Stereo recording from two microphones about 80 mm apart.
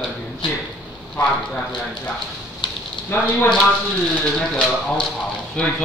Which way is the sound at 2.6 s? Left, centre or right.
Left.